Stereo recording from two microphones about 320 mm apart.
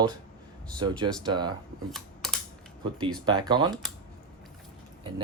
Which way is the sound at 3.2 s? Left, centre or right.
Centre.